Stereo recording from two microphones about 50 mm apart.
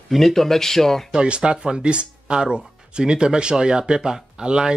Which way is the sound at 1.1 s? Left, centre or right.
Centre.